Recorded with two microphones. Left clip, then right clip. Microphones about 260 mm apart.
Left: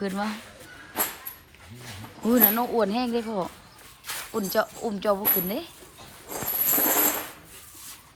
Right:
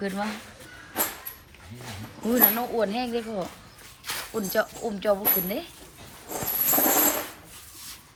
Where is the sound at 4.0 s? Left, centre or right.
Right.